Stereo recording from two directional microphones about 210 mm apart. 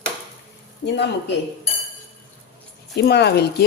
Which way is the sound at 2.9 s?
50° left (ahead or behind).